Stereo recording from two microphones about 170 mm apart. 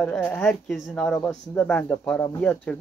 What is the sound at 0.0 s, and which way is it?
Speech, 5° left (ahead or behind).